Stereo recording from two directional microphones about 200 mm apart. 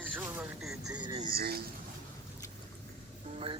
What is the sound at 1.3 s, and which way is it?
Speech, 50° right (ahead or behind).